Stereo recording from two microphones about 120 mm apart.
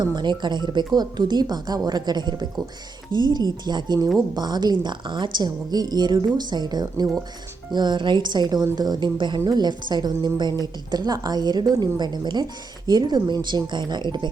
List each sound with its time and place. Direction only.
0.0 s a woman's voice: 35° right (ahead or behind)